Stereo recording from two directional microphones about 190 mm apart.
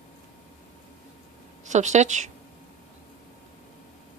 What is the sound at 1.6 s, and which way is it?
Speech, 40° right (ahead or behind).